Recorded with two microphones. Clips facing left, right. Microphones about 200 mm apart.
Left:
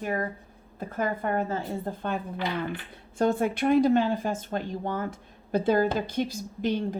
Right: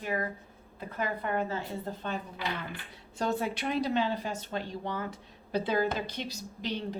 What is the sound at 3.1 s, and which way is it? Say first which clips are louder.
Speech: left 7 dB; 50° left (ahead or behind).